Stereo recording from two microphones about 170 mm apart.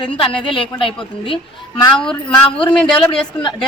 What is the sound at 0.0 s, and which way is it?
Speech, 30° left (ahead or behind).